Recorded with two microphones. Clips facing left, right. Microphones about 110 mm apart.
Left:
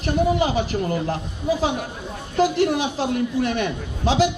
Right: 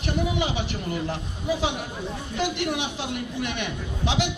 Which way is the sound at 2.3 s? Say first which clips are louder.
Left 8 dB; 35° left (ahead or behind).